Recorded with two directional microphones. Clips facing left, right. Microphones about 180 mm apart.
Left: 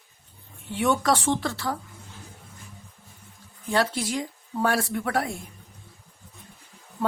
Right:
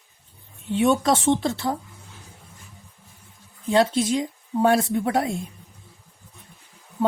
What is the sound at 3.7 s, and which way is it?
Speech, 20° right (ahead or behind).